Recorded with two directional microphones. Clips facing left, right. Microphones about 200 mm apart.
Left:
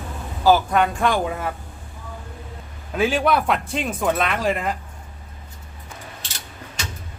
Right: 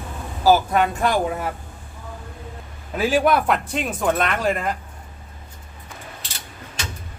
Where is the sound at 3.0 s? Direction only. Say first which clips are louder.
Right 1 dB; 5° right (ahead or behind).